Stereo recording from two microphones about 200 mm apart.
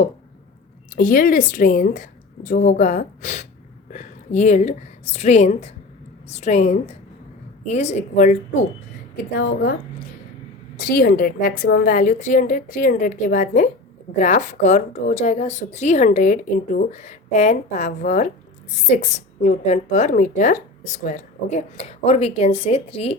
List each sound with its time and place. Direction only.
0.9 s a woman's voice: 45° left (ahead or behind)
10.8 s a woman's voice: 45° left (ahead or behind); by 23.1 s 30° left (ahead or behind)